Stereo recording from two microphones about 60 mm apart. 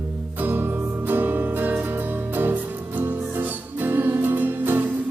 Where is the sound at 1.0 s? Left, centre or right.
Right.